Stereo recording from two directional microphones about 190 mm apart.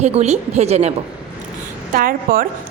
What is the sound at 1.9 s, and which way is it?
Speech, 50° right (ahead or behind).